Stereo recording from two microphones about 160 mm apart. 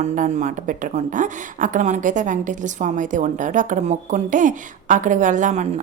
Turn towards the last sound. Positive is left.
turn(degrees=-50)  # may be behind; listen again after turning